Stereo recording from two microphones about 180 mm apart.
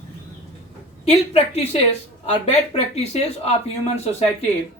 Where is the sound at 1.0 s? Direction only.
35° left (ahead or behind).